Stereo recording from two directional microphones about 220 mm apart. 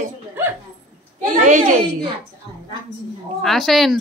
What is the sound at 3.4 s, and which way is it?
Speech, centre (ahead or behind).